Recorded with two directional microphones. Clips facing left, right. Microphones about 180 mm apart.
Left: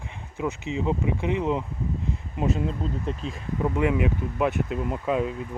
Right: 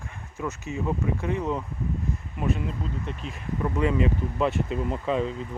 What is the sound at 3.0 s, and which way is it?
Speech, 35° left (ahead or behind).